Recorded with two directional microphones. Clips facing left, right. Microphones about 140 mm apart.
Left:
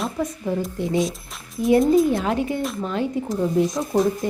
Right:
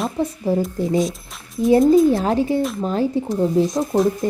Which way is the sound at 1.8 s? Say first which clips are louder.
Right 4 dB; centre (ahead or behind).